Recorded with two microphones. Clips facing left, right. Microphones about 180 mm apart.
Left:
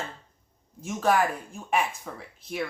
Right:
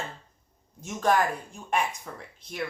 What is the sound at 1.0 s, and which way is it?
Speech, 5° left (ahead or behind).